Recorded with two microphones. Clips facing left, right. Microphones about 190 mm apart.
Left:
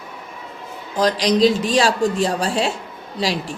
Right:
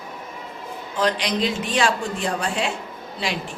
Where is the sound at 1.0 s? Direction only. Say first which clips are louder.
Left 6 dB; 35° left (ahead or behind).